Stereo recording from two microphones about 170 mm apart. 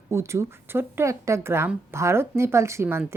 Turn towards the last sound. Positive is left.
turn(degrees=-15)  # may be behind; listen again after turning